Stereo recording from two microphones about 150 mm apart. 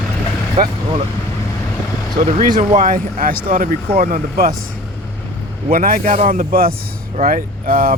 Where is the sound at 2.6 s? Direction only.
65° right (ahead or behind).